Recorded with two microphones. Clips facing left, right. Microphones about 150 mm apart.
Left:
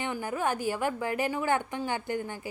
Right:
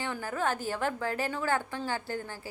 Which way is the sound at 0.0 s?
20° left (ahead or behind).